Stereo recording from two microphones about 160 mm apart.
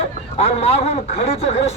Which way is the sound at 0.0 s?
40° left (ahead or behind).